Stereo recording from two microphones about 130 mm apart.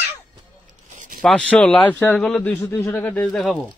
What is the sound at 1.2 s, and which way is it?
A man's voice, 10° left (ahead or behind).